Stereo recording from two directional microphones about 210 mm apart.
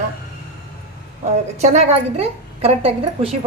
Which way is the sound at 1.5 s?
35° right (ahead or behind).